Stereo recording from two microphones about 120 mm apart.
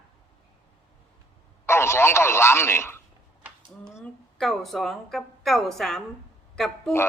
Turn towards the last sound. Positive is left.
turn(degrees=5)  # may be behind; listen again after turning